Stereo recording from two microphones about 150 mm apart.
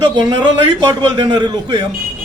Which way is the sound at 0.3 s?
30° right (ahead or behind).